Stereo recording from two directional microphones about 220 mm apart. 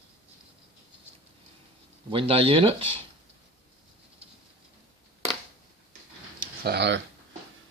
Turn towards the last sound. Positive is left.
turn(degrees=-50)  # may be behind; listen again after turning